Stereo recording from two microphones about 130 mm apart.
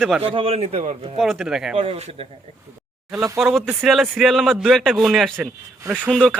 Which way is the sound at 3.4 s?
Centre (ahead or behind).